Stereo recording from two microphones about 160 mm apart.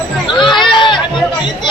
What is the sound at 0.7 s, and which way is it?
Chatter, 30° left (ahead or behind).